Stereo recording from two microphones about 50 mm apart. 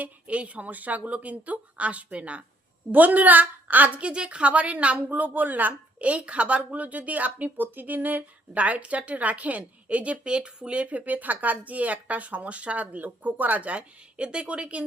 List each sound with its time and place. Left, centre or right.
0.0 s a woman's voice: right